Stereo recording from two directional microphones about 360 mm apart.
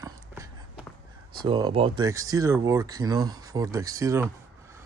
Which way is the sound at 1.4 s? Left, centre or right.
Centre.